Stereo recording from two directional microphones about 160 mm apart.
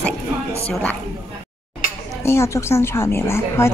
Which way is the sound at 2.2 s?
15° left (ahead or behind).